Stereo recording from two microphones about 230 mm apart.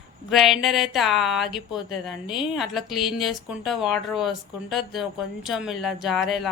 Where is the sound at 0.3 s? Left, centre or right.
Centre.